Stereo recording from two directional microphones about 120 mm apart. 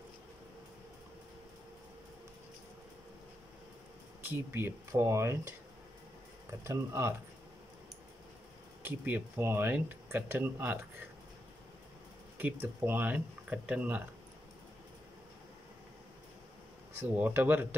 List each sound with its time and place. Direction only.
4.2 s speech: 20° right (ahead or behind)
6.6 s speech: 20° right (ahead or behind)
8.8 s speech: 15° right (ahead or behind)
12.4 s speech: 15° right (ahead or behind)
16.9 s speech: 15° right (ahead or behind)